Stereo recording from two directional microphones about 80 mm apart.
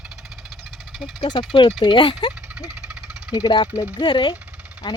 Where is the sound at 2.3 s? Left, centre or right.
Centre.